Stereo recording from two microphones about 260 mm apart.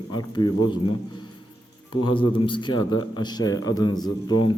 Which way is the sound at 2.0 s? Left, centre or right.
Centre.